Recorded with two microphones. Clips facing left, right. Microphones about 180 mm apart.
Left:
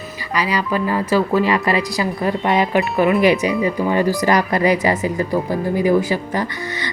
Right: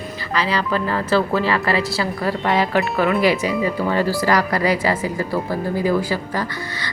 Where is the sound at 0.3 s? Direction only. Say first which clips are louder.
Left 1 dB; 10° left (ahead or behind).